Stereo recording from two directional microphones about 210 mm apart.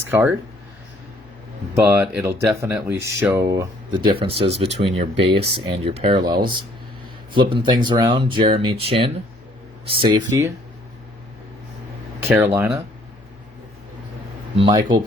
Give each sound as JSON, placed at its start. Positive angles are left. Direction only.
{"t": 0.1, "sound": "speech", "side_deg": -10}
{"t": 1.7, "sound": "speech", "side_deg": -10}
{"t": 12.3, "sound": "speech", "side_deg": -10}
{"t": 14.5, "sound": "speech", "side_deg": -20}